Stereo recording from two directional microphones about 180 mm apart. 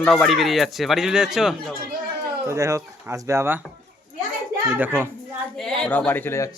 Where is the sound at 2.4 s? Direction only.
15° right (ahead or behind).